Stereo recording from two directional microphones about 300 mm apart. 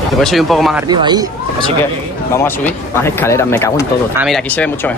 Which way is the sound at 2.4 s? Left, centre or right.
Centre.